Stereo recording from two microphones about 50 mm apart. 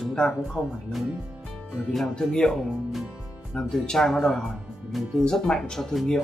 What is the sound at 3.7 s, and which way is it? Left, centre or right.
Speech, centre.